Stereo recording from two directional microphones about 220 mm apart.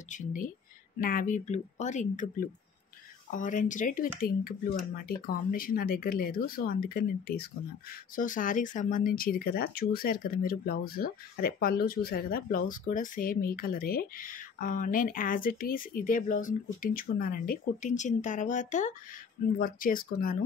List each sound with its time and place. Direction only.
0.1 s speech: 35° left (ahead or behind)